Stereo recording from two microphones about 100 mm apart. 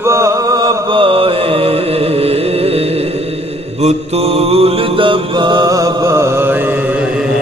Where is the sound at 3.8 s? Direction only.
85° right; by 5.7 s 50° right (ahead or behind).